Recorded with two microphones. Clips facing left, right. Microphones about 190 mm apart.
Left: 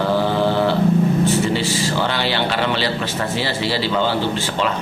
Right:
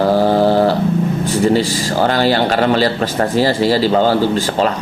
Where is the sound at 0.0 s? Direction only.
40° right (ahead or behind).